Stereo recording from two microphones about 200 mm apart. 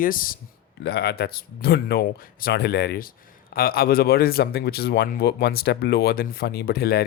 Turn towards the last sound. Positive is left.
turn(degrees=50)  # may be behind; listen again after turning